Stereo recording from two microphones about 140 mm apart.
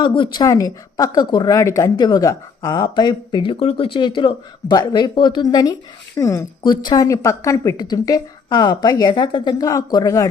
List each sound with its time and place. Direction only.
0.0 s a woman's voice: 35° left (ahead or behind)